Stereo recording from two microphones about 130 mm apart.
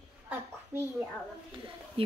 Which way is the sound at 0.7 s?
20° right (ahead or behind).